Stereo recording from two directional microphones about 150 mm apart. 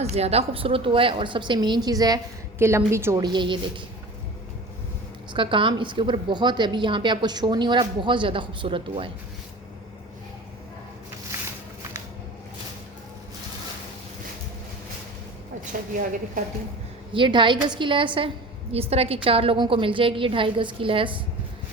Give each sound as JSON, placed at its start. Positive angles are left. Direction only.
{"t": 0.0, "sound": "speech", "side_deg": -45}
{"t": 5.3, "sound": "speech", "side_deg": -35}
{"t": 17.2, "sound": "speech", "side_deg": -35}